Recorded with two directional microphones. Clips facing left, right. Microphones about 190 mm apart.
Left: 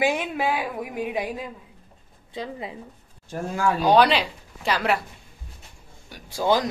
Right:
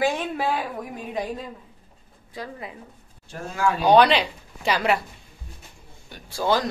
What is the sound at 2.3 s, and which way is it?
Speech, 25° left (ahead or behind).